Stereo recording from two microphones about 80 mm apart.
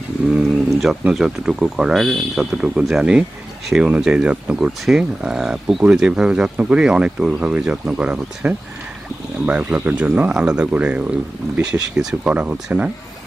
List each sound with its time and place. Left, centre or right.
1.1 s speech: centre